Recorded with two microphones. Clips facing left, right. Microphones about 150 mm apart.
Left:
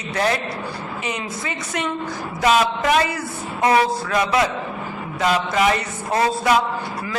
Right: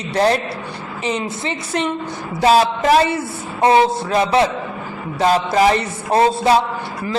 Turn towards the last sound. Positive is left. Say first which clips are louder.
# right 4 dB
turn(degrees=-30)  # may be behind; listen again after turning